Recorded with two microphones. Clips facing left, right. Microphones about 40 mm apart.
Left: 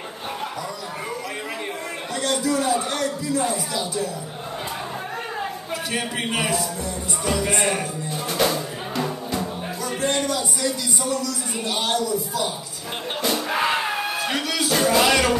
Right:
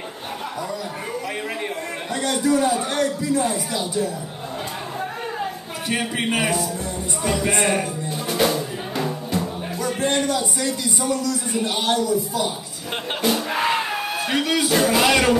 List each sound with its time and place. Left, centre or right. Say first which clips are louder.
2.4 s speech: right 5 dB; centre
5.9 s a man's voice: right 4 dB; centre
8.3 s music: right 2 dB; centre
9.8 s music: right 2 dB; centre
11.0 s speech: right 3 dB; right
13.5 s a sound: even; centre
14.4 s speech: right 4 dB; right
14.7 s music: left 1 dB; centre